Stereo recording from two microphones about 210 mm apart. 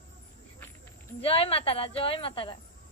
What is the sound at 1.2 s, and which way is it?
A woman's voice, 25° left (ahead or behind).